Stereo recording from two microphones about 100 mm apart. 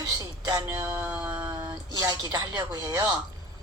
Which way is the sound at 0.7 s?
25° right (ahead or behind).